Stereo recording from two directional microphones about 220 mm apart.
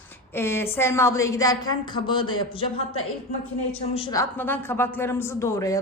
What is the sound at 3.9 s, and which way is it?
Speech, 25° left (ahead or behind).